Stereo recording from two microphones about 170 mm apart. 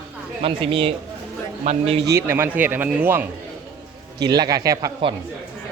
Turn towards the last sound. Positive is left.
turn(degrees=-20)  # may be behind; listen again after turning